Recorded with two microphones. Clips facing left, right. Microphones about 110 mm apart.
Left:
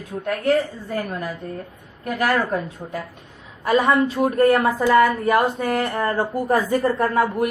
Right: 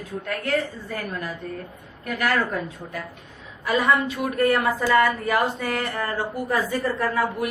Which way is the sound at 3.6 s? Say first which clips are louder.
Left 4 dB; 35° left (ahead or behind).